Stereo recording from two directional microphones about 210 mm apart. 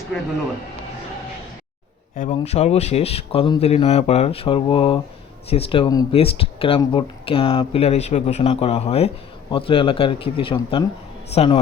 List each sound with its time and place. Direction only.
2.1 s speech: 35° left (ahead or behind)